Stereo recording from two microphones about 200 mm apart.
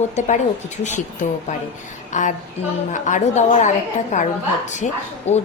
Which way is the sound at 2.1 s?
40° left (ahead or behind).